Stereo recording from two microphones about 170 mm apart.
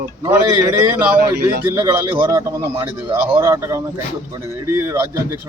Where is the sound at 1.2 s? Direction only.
65° right (ahead or behind).